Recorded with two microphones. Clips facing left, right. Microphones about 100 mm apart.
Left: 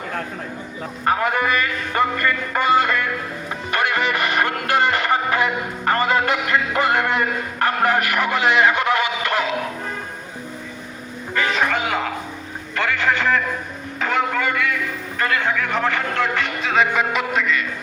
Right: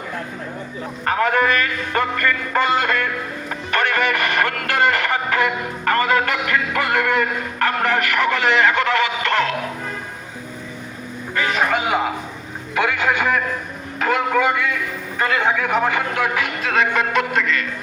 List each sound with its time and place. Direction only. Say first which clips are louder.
1.0 s music: right 2 dB; 15° left (ahead or behind)
3.7 s speech: right 1 dB; 15° left (ahead or behind)
12.7 s a man's voice: right 1 dB; 15° right (ahead or behind)
14.0 s a sound: right 3 dB; 5° right (ahead or behind)
15.2 s speech: right 2 dB; 15° right (ahead or behind); by 17.7 s 5° left (ahead or behind)